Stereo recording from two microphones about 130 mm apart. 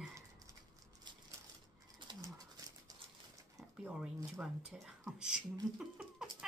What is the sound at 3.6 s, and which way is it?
Zipper, 10° right (ahead or behind).